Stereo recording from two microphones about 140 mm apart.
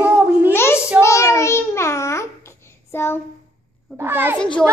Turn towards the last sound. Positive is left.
turn(degrees=-15)  # may be behind; listen again after turning